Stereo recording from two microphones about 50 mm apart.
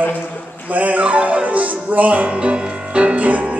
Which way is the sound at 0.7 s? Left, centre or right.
Right.